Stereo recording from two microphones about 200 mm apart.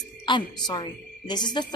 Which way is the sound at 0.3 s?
25° left (ahead or behind).